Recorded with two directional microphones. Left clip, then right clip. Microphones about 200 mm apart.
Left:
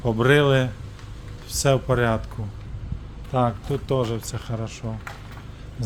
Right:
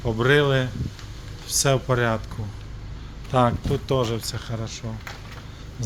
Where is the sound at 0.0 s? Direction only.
20° left (ahead or behind).